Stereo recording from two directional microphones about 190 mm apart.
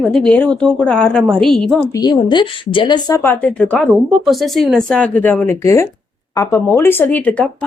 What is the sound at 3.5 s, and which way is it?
Speech, 5° left (ahead or behind).